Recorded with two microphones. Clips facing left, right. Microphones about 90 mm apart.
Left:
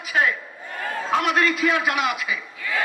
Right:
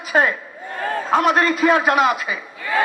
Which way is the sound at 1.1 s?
40° right (ahead or behind).